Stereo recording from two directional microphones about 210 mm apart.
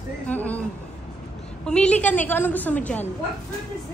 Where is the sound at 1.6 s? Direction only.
5° left (ahead or behind).